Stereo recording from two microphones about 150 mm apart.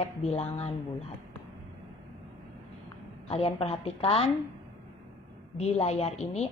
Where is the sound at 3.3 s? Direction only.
40° left (ahead or behind).